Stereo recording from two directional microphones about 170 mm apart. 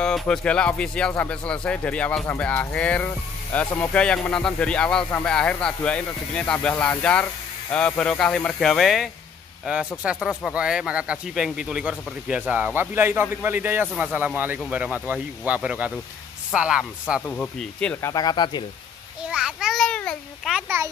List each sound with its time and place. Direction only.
0.0 s speech: 5° left (ahead or behind)
17.3 s speech: 5° left (ahead or behind)
18.1 s speech: 25° left (ahead or behind)
19.3 s a sound: 5° right (ahead or behind)
20.5 s speech: 15° right (ahead or behind)